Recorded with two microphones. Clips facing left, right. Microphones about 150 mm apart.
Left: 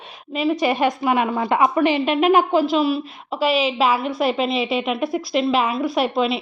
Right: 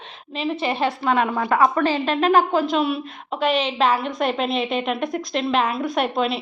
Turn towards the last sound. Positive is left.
turn(degrees=5)  # may be behind; listen again after turning